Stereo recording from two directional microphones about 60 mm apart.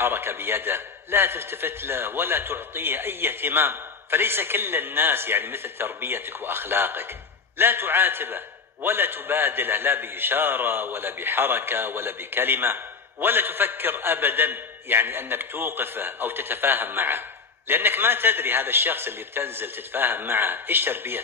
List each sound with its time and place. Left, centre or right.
0.0 s a man's voice: right